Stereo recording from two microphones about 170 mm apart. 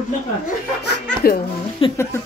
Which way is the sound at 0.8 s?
70° left (ahead or behind).